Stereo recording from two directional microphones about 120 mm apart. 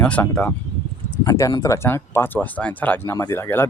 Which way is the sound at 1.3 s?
25° left (ahead or behind).